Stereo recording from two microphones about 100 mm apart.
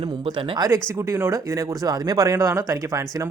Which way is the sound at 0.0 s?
45° right (ahead or behind).